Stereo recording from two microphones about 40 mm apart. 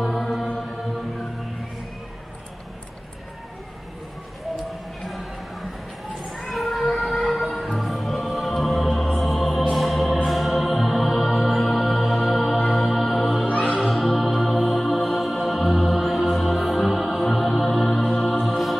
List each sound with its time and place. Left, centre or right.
0.0 s chant: centre
5.0 s music: centre
13.5 s music: left
13.7 s music: centre